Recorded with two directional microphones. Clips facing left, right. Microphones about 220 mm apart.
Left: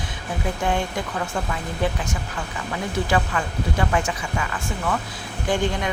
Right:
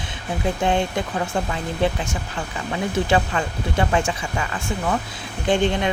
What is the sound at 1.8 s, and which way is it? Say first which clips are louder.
Speech: right 3 dB; 25° right (ahead or behind).